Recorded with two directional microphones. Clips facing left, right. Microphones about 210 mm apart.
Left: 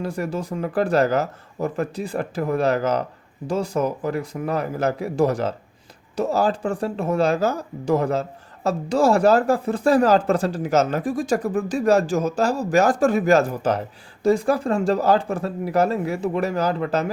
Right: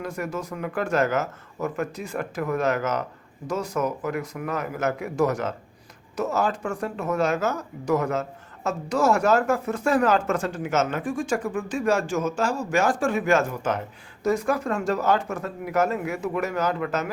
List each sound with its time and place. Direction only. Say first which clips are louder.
0.0 s speech: left 4 dB; 30° left (ahead or behind)